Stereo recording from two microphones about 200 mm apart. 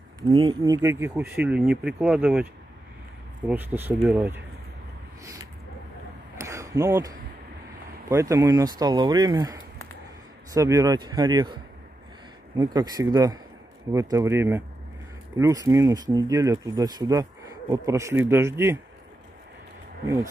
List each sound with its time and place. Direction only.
0.4 s speech: 20° right (ahead or behind)
3.4 s speech: 10° right (ahead or behind)
6.3 s a sound: 15° right (ahead or behind)
8.1 s speech: 15° right (ahead or behind)